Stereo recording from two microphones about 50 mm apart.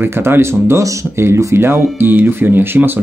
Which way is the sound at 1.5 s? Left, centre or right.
Right.